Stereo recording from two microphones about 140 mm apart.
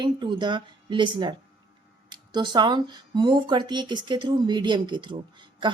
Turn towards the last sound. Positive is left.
turn(degrees=-35)  # may be behind; listen again after turning